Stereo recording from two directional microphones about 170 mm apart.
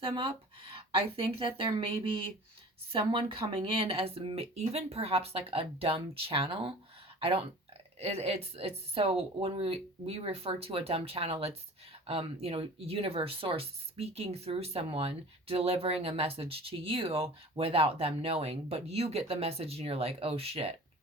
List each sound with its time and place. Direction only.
0.0 s speech: 30° right (ahead or behind)